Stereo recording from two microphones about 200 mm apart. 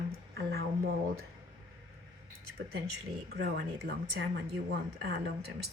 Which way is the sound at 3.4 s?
55° right (ahead or behind).